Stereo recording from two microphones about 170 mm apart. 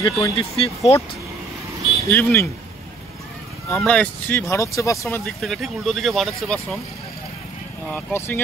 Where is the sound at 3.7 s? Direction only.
5° left (ahead or behind).